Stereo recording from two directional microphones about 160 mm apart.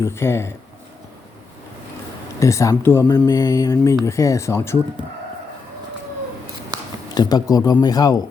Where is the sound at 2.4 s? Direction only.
20° left (ahead or behind).